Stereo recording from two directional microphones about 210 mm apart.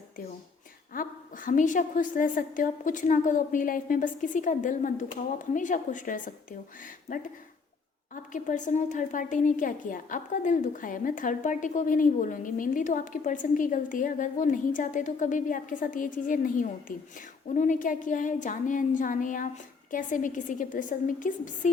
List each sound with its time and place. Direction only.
0.9 s a woman's voice: 40° left (ahead or behind)
8.1 s a woman's voice: 35° left (ahead or behind)